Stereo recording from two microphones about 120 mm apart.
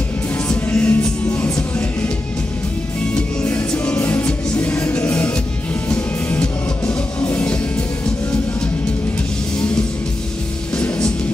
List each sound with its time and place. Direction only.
0.5 s music: 15° left (ahead or behind)
3.2 s music: 15° left (ahead or behind)